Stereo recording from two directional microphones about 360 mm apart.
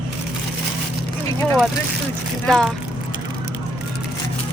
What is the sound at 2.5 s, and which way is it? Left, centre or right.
Speech, centre.